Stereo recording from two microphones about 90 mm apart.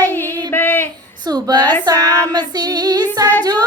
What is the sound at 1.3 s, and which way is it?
Speech, 50° right (ahead or behind).